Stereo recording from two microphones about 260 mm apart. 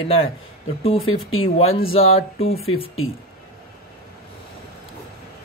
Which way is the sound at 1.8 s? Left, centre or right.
Left.